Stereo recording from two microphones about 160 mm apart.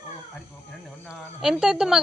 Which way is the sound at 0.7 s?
5° right (ahead or behind).